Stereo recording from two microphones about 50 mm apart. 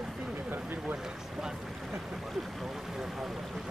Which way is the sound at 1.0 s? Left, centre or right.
Centre.